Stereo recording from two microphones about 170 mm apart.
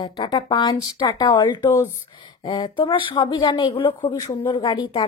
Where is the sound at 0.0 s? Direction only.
25° left (ahead or behind).